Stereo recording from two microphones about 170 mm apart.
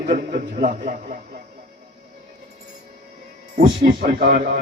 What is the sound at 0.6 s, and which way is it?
Speech, 55° right (ahead or behind).